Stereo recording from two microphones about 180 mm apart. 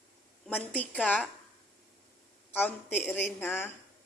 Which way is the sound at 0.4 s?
10° left (ahead or behind).